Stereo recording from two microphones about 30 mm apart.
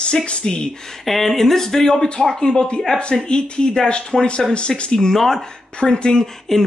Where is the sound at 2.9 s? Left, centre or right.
Left.